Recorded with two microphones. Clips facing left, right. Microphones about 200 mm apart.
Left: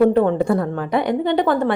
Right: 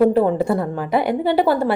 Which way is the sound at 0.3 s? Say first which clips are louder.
Left 1 dB; 5° right (ahead or behind).